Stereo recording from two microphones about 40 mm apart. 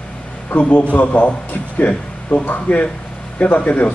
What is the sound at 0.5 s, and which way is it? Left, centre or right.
A man's voice, left.